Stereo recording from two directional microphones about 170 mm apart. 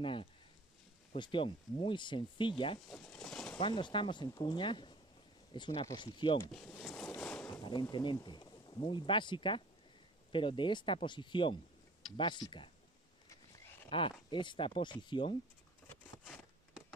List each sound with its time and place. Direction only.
0.0 s speech: 30° left (ahead or behind)
2.9 s pigeon: 5° left (ahead or behind)
3.6 s speech: 30° left (ahead or behind)
6.8 s boat: 5° left (ahead or behind)
7.9 s speech: 25° left (ahead or behind)
13.8 s speech: 30° left (ahead or behind)